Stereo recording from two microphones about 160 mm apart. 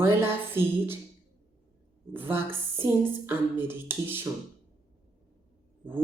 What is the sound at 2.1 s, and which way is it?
Speech, 15° right (ahead or behind).